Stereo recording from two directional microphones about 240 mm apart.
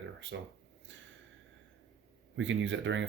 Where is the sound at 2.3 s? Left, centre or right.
Right.